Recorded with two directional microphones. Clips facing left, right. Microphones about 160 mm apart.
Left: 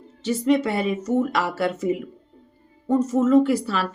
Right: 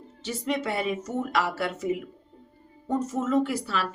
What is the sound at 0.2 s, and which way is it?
A woman's voice, 35° left (ahead or behind).